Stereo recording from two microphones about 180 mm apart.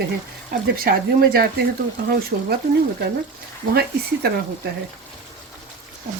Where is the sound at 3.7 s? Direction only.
65° right (ahead or behind).